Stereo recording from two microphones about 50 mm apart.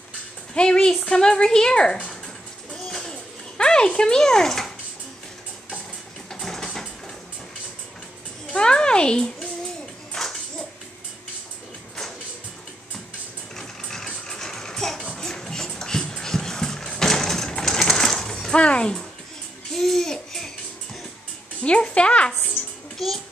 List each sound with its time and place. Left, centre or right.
0.6 s a woman's voice: centre
2.7 s a sound: centre
6.4 s engine: centre
8.5 s a child's voice: centre
13.6 s mechanisms: centre
14.0 s music: centre
15.0 s a sound: centre
18.5 s a sound: left
19.7 s babbling: centre
21.6 s music: left
22.9 s music: centre